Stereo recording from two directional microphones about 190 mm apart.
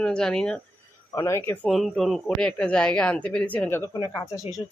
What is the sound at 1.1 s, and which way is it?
Speech, 15° left (ahead or behind).